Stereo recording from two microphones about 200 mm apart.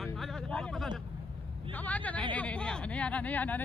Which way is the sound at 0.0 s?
Centre (ahead or behind).